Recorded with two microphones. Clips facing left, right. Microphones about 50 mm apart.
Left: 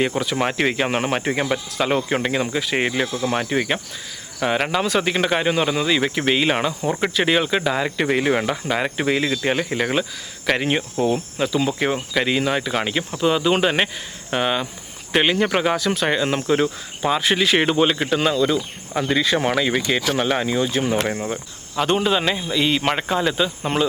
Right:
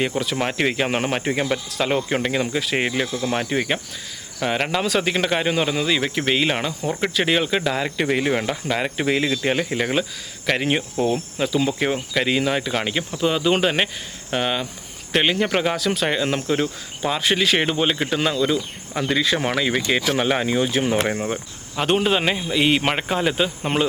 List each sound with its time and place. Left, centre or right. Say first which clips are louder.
0.2 s speech: left 1 dB; centre